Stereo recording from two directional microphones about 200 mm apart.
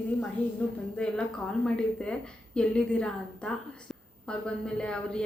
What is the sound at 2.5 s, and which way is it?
A woman's voice, 5° left (ahead or behind).